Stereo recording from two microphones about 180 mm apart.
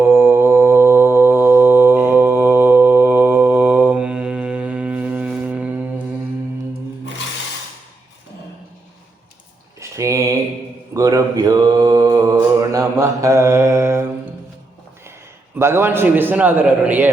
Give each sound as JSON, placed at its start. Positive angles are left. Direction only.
{"t": 0.0, "sound": "mantra", "side_deg": -15}
{"t": 9.8, "sound": "a sound", "side_deg": -15}
{"t": 10.9, "sound": "mantra", "side_deg": -20}
{"t": 15.5, "sound": "a man's voice", "side_deg": -15}